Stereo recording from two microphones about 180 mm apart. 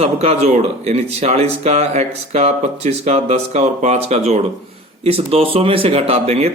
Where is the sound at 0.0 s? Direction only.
35° right (ahead or behind).